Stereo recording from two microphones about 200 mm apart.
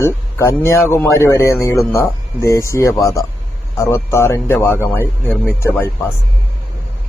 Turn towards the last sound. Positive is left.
turn(degrees=10)  # may be behind; listen again after turning